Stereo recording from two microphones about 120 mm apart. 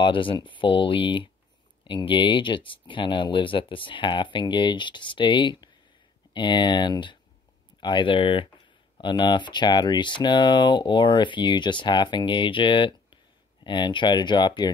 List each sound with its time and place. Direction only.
0.0 s speech: 45° left (ahead or behind)